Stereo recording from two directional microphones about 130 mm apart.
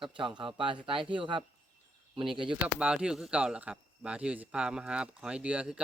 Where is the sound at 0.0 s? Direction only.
40° right (ahead or behind).